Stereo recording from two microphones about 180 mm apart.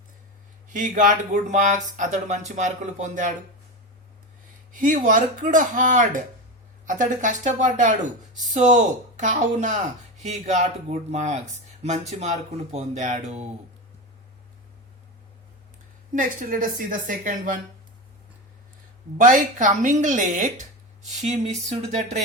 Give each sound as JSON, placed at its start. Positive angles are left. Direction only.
{"t": 0.7, "sound": "speech", "side_deg": -45}
{"t": 4.7, "sound": "speech", "side_deg": -45}
{"t": 16.1, "sound": "speech", "side_deg": -50}
{"t": 19.1, "sound": "speech", "side_deg": -45}